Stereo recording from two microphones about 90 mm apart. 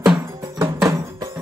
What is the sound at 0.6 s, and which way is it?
Music, 35° right (ahead or behind).